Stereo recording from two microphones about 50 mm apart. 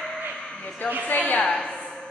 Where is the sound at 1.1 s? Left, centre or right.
Left.